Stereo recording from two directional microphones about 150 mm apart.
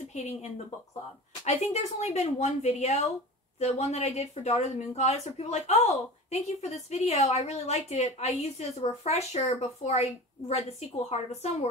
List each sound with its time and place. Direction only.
0.1 s speech: 50° left (ahead or behind)